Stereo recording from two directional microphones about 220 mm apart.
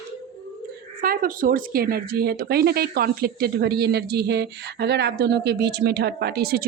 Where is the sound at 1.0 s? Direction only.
40° right (ahead or behind).